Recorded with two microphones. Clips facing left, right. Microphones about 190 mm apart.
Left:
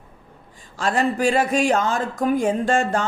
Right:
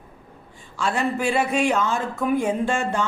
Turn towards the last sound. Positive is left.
turn(degrees=45)  # may be behind; listen again after turning